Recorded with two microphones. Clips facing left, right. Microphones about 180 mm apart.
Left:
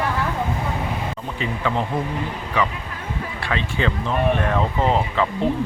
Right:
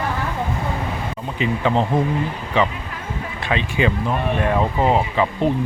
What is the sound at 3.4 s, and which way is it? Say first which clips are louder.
Speech: right 4 dB; 20° right (ahead or behind).